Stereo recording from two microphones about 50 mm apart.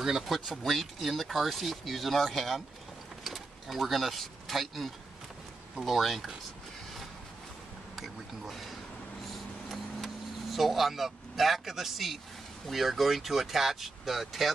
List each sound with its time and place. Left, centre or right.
0.0 s speech: centre
7.9 s speech: centre
9.7 s vehicle: centre
12.6 s speech: centre